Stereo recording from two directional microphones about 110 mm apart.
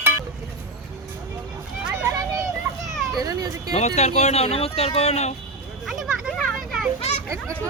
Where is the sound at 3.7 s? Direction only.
90° left.